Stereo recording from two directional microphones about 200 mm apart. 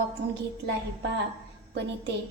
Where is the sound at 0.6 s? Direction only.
60° right (ahead or behind).